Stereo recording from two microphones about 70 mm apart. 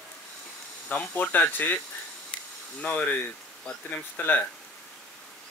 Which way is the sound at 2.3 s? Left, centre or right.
Centre.